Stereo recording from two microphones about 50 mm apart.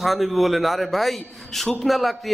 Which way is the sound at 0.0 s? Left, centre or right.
Centre.